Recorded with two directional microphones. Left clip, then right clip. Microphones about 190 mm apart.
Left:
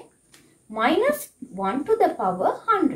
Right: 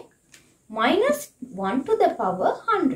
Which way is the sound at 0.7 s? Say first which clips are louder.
Even; 20° right (ahead or behind).